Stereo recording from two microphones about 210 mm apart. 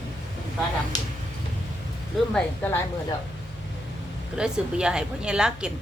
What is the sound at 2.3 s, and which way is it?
Speech, 10° left (ahead or behind).